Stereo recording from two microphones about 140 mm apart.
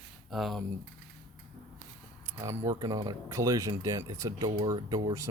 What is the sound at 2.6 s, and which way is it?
Speech, 25° right (ahead or behind).